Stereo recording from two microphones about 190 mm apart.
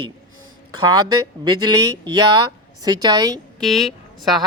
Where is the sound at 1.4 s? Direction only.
20° right (ahead or behind).